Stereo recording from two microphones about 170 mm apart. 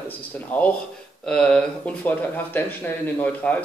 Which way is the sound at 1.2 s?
5° left (ahead or behind).